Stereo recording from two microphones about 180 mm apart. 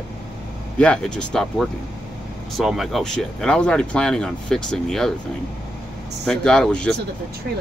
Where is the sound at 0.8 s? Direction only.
5° left (ahead or behind).